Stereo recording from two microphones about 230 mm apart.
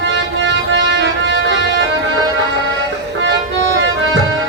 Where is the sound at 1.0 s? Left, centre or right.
Right.